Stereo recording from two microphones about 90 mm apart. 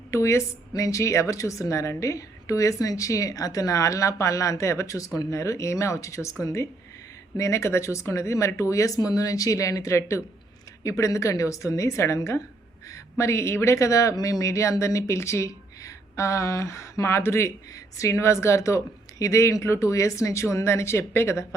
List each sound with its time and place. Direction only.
0.1 s a woman's voice: 30° left (ahead or behind)